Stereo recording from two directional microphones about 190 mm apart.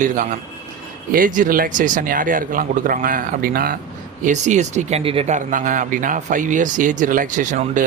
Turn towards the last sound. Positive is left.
turn(degrees=-40)  # may be behind; listen again after turning